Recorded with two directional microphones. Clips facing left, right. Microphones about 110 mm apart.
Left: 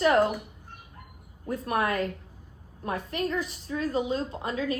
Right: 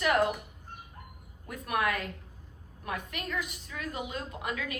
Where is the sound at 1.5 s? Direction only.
35° left (ahead or behind).